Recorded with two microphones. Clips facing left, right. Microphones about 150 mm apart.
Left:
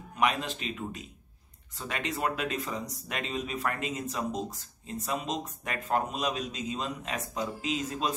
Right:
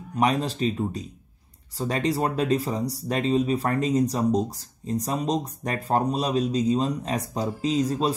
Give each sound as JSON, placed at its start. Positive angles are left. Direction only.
{"t": 0.1, "sound": "speech", "side_deg": -35}